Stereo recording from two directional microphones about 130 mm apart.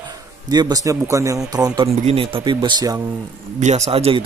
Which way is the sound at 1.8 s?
45° right (ahead or behind).